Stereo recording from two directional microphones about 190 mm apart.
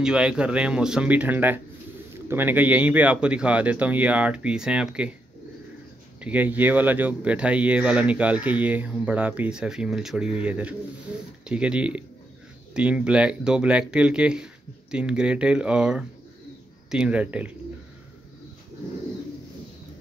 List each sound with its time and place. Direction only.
0.0 s speech: 5° right (ahead or behind)
6.2 s speech: 10° right (ahead or behind)